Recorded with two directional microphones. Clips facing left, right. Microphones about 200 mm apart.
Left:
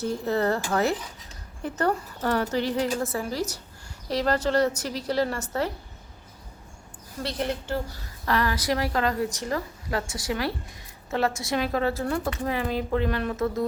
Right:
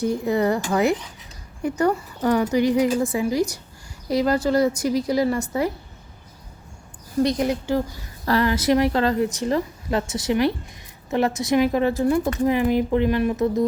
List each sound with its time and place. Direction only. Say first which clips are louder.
0.0 s a woman's voice: right 4 dB; 15° right (ahead or behind)
7.2 s a woman's voice: right 9 dB; 10° right (ahead or behind)
8.2 s speech: right 5 dB; 35° right (ahead or behind)
8.4 s a woman's voice: right 8 dB; 25° right (ahead or behind)